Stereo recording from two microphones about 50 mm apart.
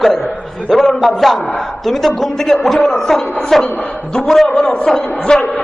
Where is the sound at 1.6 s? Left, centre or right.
Centre.